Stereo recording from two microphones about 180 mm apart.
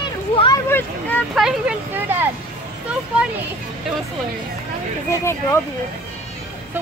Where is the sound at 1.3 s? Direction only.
5° right (ahead or behind).